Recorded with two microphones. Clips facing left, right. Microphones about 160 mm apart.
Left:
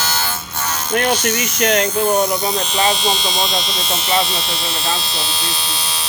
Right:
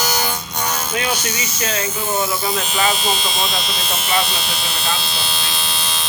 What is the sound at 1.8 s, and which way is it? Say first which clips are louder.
Speech: left 6 dB; 5° right (ahead or behind).